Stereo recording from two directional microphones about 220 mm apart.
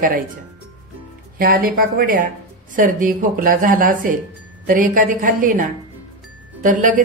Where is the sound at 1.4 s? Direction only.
40° right (ahead or behind).